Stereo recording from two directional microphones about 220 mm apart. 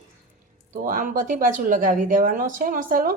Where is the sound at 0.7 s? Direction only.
40° right (ahead or behind).